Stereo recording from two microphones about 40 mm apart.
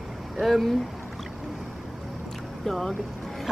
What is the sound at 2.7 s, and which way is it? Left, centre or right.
Vehicle, centre.